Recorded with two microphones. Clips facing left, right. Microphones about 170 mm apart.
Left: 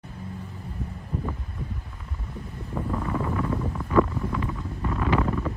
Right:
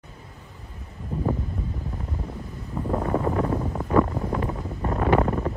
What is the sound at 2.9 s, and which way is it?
Wind noise, 35° right (ahead or behind).